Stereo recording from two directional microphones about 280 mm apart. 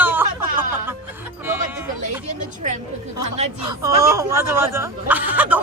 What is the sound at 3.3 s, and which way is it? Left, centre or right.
Speech, right.